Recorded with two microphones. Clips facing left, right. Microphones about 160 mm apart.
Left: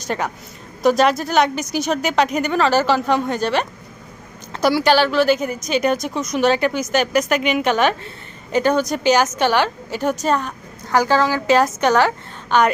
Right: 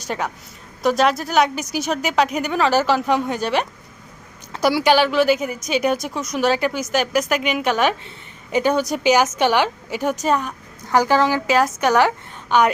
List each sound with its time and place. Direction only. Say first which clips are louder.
0.0 s a woman's voice: left 2 dB; centre (ahead or behind); by 11.4 s 20° right (ahead or behind)
11.4 s a woman's voice: left 2 dB; 5° right (ahead or behind)